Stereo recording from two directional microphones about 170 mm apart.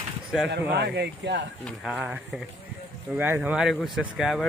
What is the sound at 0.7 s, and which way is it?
Speech, 80° right.